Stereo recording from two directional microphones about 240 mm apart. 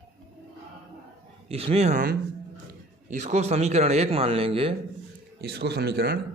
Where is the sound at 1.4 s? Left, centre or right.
Right.